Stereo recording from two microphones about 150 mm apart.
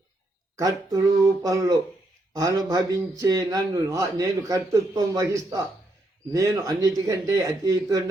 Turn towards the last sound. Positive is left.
turn(degrees=-25)  # may be behind; listen again after turning